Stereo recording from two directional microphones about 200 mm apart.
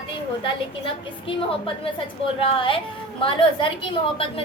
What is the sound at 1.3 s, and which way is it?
A woman's voice, 25° left (ahead or behind).